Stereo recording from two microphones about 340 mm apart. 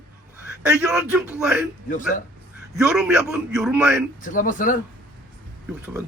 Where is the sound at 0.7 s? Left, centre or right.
Centre.